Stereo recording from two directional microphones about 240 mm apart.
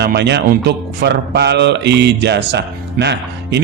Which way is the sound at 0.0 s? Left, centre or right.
Right.